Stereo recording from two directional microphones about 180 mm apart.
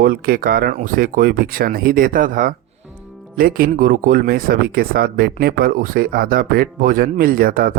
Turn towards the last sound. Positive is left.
turn(degrees=-55)  # may be behind; listen again after turning